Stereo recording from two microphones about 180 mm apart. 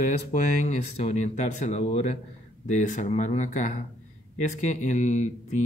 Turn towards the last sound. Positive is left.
turn(degrees=40)  # may be behind; listen again after turning